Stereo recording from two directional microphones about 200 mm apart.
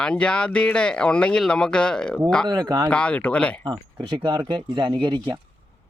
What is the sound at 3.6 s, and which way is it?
Speech, 25° right (ahead or behind).